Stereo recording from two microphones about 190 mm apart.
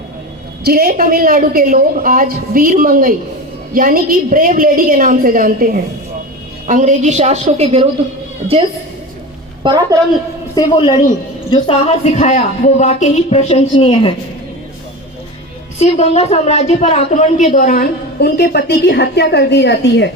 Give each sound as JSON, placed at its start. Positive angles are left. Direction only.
{"t": 0.6, "sound": "a woman's voice", "side_deg": -55}
{"t": 9.6, "sound": "a woman's voice", "side_deg": -20}
{"t": 10.5, "sound": "a man's voice", "side_deg": 20}
{"t": 15.8, "sound": "a woman's voice", "side_deg": 35}